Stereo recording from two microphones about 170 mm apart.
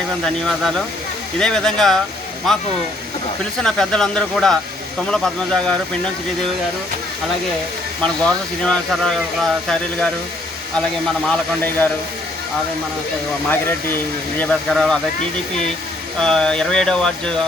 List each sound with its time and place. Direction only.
0.3 s speech: 5° left (ahead or behind)
3.6 s speech: 5° left (ahead or behind)
8.0 s speech: 5° left (ahead or behind)
11.3 s speech: 10° left (ahead or behind)
13.5 s speech: 10° left (ahead or behind)
14.7 s speech: centre (ahead or behind)
16.2 s speech: 5° left (ahead or behind)